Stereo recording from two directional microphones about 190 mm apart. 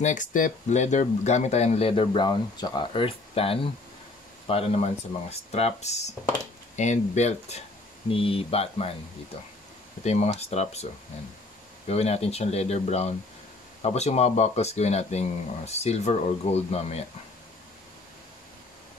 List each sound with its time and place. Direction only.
0.0 s speech: 40° left (ahead or behind)
10.0 s speech: 35° left (ahead or behind)
11.9 s speech: 35° left (ahead or behind)